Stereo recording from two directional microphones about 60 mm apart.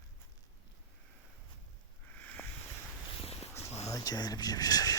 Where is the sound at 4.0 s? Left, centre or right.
Left.